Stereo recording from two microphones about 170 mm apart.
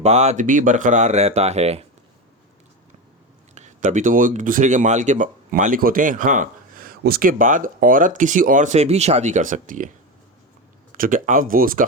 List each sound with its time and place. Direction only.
0.0 s speech: 40° right (ahead or behind)
3.5 s speech: 45° right (ahead or behind)
10.9 s speech: 55° right (ahead or behind)